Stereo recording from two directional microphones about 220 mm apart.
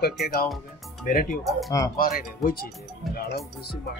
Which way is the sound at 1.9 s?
40° left (ahead or behind).